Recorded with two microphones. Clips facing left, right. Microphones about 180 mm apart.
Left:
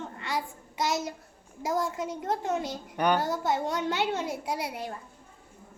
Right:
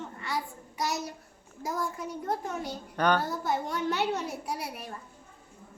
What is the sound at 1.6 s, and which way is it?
Speech, 90° left.